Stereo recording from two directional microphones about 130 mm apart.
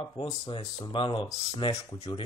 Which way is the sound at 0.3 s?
35° left (ahead or behind).